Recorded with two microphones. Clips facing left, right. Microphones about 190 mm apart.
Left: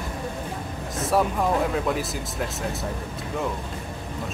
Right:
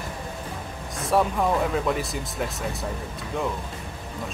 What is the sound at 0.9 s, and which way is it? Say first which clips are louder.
Speech: even; centre (ahead or behind).